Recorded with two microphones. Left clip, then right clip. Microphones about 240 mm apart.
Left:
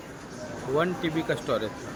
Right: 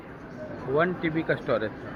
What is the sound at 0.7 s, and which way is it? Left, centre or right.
Speech, centre.